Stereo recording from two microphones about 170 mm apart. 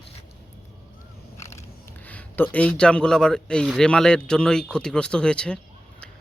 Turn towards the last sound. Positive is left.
turn(degrees=5)  # may be behind; listen again after turning